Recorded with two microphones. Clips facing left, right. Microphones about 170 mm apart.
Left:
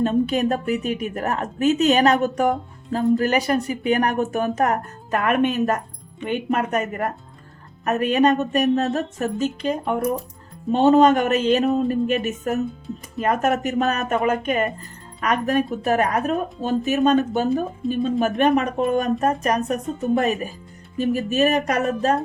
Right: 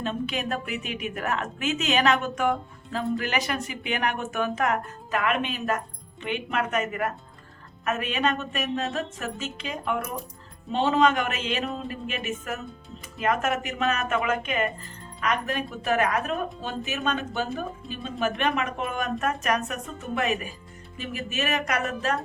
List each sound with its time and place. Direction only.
0.0 s a woman's voice: 40° left (ahead or behind)